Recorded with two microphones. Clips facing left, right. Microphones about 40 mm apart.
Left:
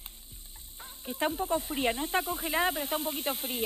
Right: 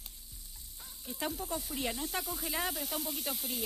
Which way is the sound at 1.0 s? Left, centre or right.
Left.